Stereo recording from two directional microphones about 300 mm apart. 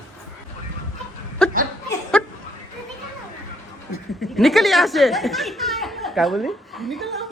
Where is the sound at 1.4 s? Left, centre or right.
Centre.